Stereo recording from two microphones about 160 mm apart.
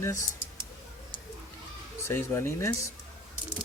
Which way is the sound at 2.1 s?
15° left (ahead or behind).